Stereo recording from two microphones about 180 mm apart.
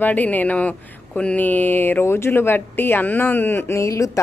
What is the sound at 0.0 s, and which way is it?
Speech, 10° left (ahead or behind).